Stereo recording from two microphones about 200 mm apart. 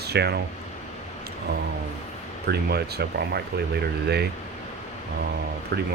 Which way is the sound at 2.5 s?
55° right (ahead or behind).